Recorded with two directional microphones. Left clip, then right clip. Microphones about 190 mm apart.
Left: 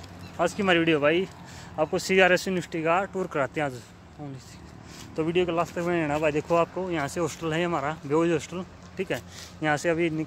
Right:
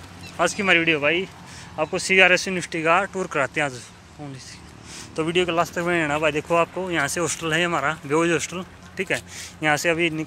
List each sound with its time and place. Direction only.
0.4 s speech: 5° left (ahead or behind)
0.7 s speech: 25° left (ahead or behind)
2.8 s speech: centre (ahead or behind)
5.1 s speech: centre (ahead or behind)
6.0 s speech: 10° left (ahead or behind)